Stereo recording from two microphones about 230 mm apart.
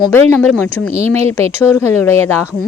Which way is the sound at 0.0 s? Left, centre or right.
Centre.